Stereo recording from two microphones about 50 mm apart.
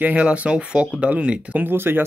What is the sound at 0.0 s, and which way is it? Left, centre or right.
Speech, right.